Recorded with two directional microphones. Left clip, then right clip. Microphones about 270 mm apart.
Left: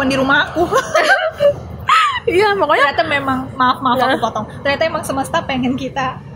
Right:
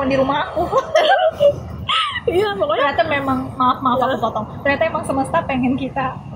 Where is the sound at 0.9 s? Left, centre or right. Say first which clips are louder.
Right 1 dB; centre.